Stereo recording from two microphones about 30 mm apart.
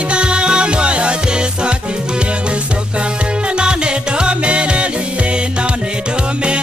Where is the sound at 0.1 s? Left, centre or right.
Right.